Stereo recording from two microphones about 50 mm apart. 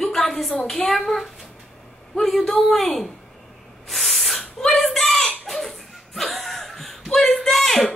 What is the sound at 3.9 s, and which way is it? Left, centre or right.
Spray, centre.